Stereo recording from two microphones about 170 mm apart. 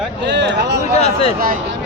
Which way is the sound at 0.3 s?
90° right.